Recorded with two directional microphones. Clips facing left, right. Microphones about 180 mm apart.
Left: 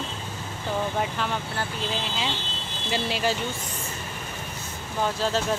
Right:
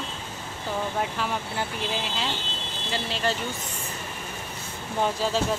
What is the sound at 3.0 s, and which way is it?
Speech, 10° left (ahead or behind).